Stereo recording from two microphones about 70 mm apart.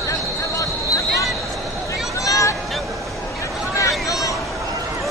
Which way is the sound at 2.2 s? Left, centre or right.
Left.